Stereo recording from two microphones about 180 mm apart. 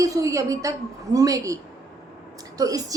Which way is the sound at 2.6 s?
20° right (ahead or behind).